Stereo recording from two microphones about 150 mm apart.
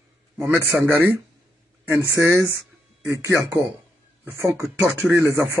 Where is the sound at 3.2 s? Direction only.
20° right (ahead or behind).